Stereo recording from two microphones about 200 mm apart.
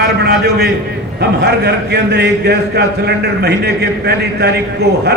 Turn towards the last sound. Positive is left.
turn(degrees=-55)  # may be behind; listen again after turning